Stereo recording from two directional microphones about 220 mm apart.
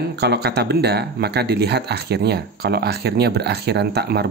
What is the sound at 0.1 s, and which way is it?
Speech, 50° right (ahead or behind).